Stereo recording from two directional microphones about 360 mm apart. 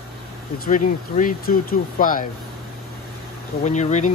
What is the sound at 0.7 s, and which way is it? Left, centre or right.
Speech, left.